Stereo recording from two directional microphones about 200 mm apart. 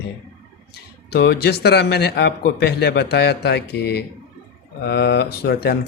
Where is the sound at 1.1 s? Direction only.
55° left (ahead or behind).